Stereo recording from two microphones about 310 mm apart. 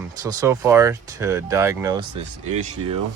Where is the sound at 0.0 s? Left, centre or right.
Centre.